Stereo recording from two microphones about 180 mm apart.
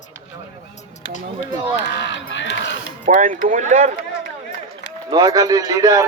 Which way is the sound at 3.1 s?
50° right (ahead or behind).